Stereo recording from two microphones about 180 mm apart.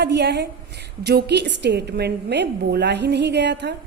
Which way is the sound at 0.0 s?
70° right (ahead or behind).